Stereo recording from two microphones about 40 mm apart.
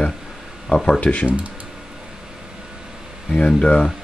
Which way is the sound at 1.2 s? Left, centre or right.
Right.